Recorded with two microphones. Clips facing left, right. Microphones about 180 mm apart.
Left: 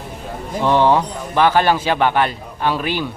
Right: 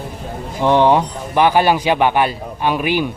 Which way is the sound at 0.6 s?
15° right (ahead or behind).